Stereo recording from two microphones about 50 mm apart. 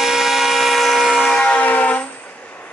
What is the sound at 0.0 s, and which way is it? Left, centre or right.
Vehicle, centre.